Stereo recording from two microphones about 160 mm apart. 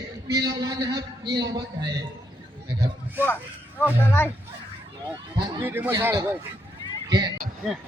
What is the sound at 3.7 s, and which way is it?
Speech, 15° left (ahead or behind).